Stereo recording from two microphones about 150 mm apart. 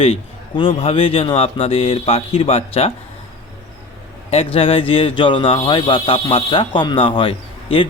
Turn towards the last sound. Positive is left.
turn(degrees=35)  # may be behind; listen again after turning